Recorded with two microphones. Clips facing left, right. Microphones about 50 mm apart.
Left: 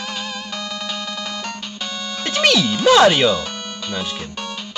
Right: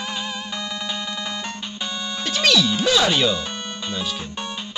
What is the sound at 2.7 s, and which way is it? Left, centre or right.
Speech, left.